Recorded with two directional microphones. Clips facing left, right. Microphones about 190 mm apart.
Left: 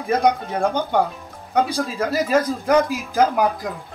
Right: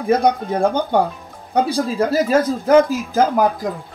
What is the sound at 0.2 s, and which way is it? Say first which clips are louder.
Speech: right 2 dB; 35° right (ahead or behind).